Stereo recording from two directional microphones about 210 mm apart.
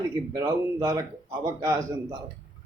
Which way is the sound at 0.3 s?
15° right (ahead or behind).